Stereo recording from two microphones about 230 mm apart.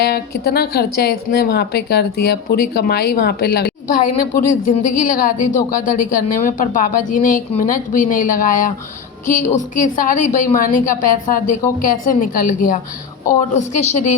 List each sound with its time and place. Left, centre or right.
0.0 s a woman's voice: left